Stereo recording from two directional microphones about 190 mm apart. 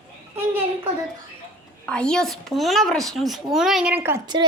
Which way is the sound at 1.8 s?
5° left (ahead or behind).